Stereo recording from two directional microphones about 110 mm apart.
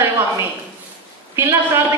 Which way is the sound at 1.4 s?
20° right (ahead or behind).